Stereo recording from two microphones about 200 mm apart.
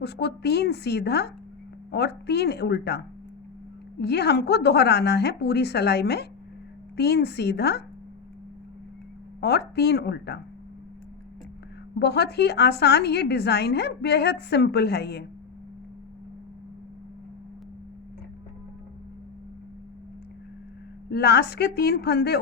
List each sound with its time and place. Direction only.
0.0 s a woman's voice: 55° left (ahead or behind)
4.0 s a woman's voice: 55° left (ahead or behind)
9.4 s a woman's voice: 55° left (ahead or behind)
11.9 s a woman's voice: 55° left (ahead or behind)
21.1 s a woman's voice: 55° left (ahead or behind)